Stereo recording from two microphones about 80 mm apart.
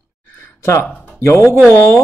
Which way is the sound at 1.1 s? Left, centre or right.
Left.